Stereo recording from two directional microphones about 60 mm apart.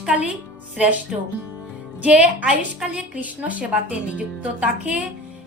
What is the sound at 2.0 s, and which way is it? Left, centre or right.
Speech, right.